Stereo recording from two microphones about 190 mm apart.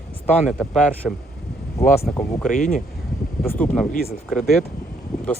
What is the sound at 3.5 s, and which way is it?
Speech, 10° left (ahead or behind).